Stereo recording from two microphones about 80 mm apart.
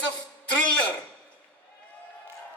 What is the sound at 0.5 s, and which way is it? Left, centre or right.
Speech, centre.